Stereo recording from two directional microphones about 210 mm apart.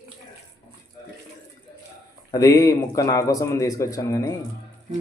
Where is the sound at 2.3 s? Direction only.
15° left (ahead or behind).